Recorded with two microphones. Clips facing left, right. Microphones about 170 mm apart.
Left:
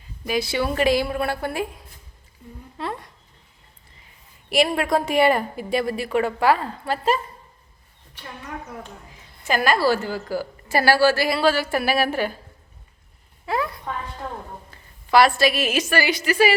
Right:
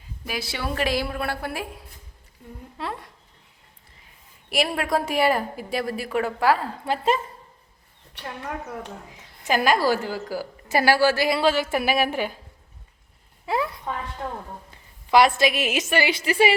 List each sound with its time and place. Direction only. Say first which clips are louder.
0.3 s a woman's voice: left 7 dB; centre (ahead or behind)
2.7 s a sound: left 2 dB; centre (ahead or behind)
4.4 s a woman's voice: left 4 dB; centre (ahead or behind)
6.8 s a woman's voice: even; 20° right (ahead or behind)
9.5 s a woman's voice: left 1 dB; 15° right (ahead or behind)
13.4 s a sound: even; 20° right (ahead or behind)
14.7 s a woman's voice: even; 20° right (ahead or behind)